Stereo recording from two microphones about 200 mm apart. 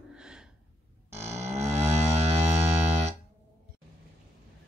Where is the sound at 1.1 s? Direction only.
30° right (ahead or behind).